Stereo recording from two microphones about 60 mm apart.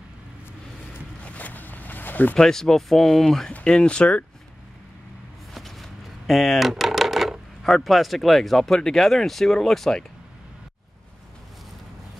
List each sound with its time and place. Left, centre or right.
1.2 s zipper: left
2.3 s speech: centre
3.5 s speech: centre
5.5 s a sound: centre
6.7 s speech: centre